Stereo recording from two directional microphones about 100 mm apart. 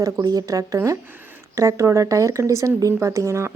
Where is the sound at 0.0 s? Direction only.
40° right (ahead or behind).